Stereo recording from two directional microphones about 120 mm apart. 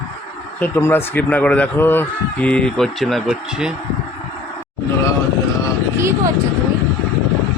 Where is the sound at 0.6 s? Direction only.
20° left (ahead or behind); by 3.7 s centre (ahead or behind).